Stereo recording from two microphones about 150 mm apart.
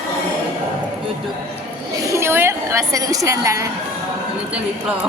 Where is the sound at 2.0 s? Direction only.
20° right (ahead or behind).